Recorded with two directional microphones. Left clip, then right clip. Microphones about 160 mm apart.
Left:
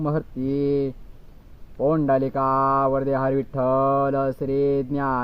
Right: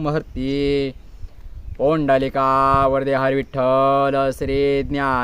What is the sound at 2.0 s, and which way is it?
Speech, 45° right (ahead or behind).